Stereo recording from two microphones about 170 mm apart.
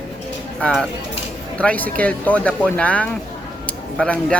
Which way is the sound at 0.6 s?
5° left (ahead or behind).